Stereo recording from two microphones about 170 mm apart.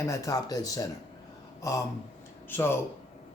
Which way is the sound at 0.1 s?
20° left (ahead or behind).